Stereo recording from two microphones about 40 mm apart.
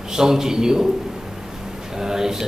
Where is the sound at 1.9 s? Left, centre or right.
Centre.